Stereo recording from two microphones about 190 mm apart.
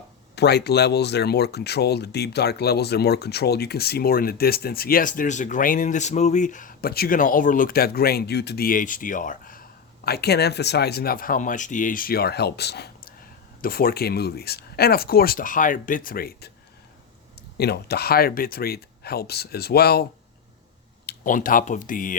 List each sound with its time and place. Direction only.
0.3 s speech: 60° left (ahead or behind)
17.6 s speech: 55° left (ahead or behind)
21.1 s speech: 45° left (ahead or behind)